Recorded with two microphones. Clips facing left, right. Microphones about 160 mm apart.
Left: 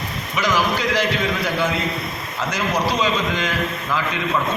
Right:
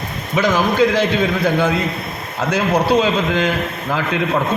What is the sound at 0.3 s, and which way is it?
A man's voice, 55° right (ahead or behind).